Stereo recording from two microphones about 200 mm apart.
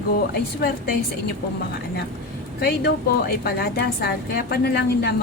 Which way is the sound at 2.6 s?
55° left (ahead or behind).